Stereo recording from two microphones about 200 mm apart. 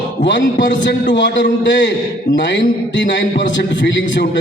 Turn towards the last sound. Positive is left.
turn(degrees=65)  # may be behind; listen again after turning